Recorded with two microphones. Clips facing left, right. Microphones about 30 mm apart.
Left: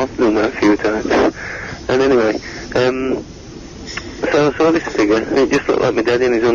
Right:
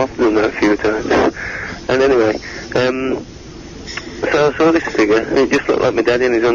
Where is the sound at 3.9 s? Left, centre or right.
Centre.